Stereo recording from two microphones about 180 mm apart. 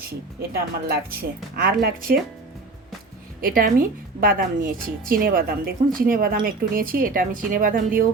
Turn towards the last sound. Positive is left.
turn(degrees=-50)  # may be behind; listen again after turning